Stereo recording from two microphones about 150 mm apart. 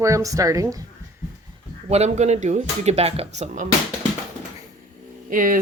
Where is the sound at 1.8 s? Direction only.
45° right (ahead or behind).